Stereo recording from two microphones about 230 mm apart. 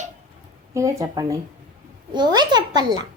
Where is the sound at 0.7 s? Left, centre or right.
Centre.